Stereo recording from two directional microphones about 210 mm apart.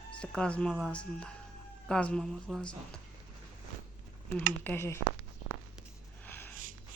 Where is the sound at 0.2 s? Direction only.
5° left (ahead or behind).